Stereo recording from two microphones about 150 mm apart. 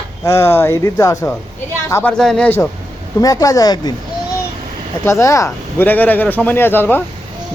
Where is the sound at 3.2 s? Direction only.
25° left (ahead or behind).